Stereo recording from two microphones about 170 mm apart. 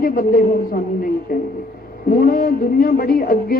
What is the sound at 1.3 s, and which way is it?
Speech, 60° left (ahead or behind).